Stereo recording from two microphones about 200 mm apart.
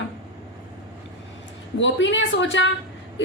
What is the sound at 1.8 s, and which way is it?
Speech, 65° left (ahead or behind).